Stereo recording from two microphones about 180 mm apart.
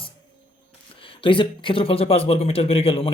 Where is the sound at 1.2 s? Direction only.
30° left (ahead or behind).